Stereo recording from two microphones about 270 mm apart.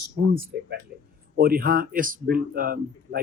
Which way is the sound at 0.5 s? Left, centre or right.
Right.